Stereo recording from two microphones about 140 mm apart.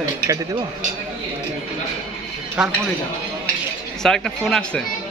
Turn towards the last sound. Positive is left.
turn(degrees=5)  # may be behind; listen again after turning